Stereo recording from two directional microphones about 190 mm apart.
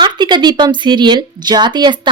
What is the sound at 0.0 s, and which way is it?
A woman's voice, 25° right (ahead or behind).